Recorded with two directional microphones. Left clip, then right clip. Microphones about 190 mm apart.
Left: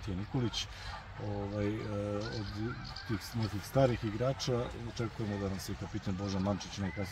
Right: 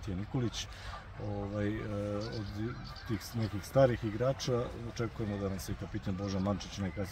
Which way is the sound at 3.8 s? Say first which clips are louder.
Right 3 dB; 5° right (ahead or behind).